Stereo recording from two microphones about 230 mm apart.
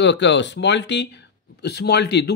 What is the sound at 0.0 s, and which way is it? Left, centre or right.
Speech, left.